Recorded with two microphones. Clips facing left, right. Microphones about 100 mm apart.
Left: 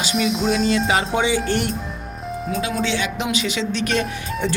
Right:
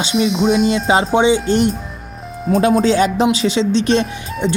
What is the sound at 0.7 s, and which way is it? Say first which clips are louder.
Speech: right 5 dB; 25° right (ahead or behind).